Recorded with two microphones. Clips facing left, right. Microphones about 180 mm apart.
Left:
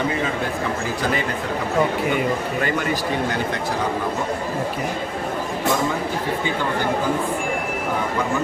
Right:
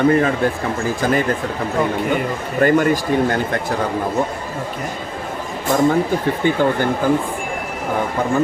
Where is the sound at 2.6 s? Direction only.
45° right (ahead or behind).